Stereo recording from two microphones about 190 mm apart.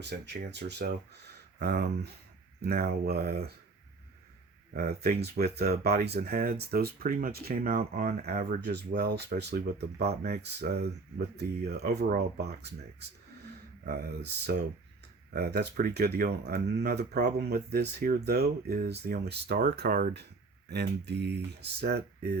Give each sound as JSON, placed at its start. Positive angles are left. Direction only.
{"t": 0.5, "sound": "speech", "side_deg": -60}
{"t": 4.7, "sound": "speech", "side_deg": -55}
{"t": 13.8, "sound": "speech", "side_deg": -55}
{"t": 20.7, "sound": "speech", "side_deg": -60}